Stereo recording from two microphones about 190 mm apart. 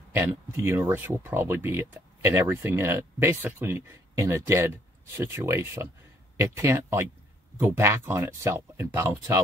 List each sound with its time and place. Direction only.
0.1 s speech: 15° right (ahead or behind)